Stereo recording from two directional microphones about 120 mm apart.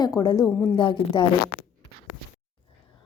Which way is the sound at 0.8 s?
45° left (ahead or behind).